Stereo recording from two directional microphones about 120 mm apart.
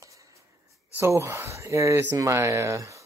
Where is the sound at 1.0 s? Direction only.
20° right (ahead or behind).